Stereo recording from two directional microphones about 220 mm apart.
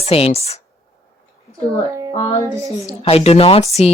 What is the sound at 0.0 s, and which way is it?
Speech, 25° left (ahead or behind).